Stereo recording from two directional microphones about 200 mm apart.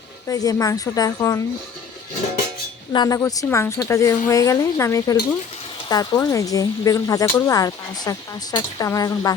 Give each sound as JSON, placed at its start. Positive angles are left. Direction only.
{"t": 0.3, "sound": "speech", "side_deg": 15}
{"t": 2.9, "sound": "speech", "side_deg": 20}